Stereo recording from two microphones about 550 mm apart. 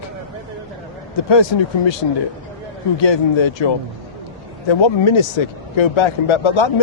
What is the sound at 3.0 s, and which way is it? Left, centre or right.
Speech, left.